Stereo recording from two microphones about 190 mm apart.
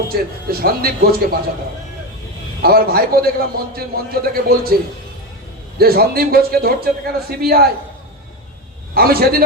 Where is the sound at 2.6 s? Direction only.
55° right (ahead or behind).